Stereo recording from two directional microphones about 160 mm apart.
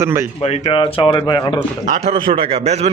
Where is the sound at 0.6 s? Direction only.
30° left (ahead or behind).